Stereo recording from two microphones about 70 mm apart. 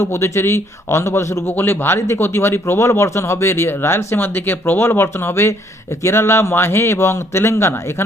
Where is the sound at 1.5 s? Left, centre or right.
Left.